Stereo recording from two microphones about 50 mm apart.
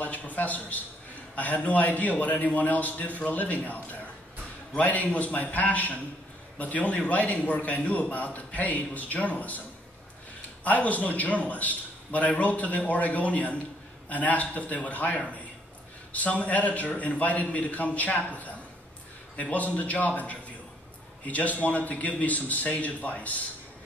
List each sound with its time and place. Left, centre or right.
0.0 s a man's voice: left
10.6 s a man's voice: left
19.5 s a man's voice: left